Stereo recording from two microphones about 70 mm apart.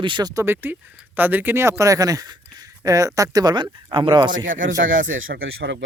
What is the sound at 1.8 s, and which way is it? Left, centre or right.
Speech, right.